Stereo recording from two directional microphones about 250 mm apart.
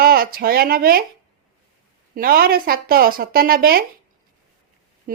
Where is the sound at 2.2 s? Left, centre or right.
Right.